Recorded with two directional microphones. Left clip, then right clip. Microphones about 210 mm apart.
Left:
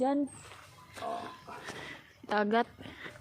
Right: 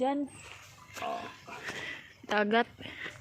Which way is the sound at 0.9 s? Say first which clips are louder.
Right 1 dB; 20° right (ahead or behind).